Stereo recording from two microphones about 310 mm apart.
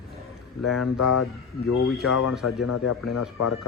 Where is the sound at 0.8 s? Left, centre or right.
Left.